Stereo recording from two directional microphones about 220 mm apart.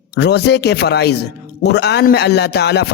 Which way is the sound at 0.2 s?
50° left (ahead or behind).